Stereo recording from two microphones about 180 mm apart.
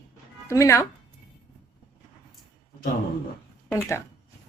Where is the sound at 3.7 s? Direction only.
15° left (ahead or behind).